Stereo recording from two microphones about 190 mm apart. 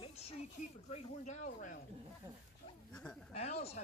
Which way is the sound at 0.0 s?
30° left (ahead or behind).